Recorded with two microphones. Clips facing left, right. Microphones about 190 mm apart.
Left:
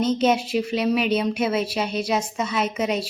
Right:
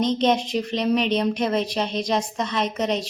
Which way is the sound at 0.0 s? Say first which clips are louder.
Even; 5° left (ahead or behind).